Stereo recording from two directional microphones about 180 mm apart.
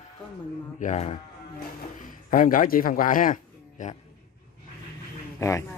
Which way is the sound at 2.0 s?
50° left (ahead or behind).